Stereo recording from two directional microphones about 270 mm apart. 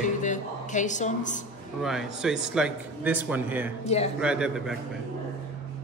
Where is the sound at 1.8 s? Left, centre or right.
Centre.